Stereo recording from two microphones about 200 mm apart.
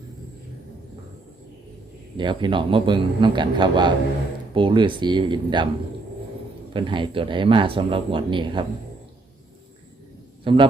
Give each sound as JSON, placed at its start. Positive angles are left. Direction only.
{"t": 2.1, "sound": "speech", "side_deg": -25}
{"t": 6.7, "sound": "speech", "side_deg": -25}
{"t": 10.5, "sound": "speech", "side_deg": -25}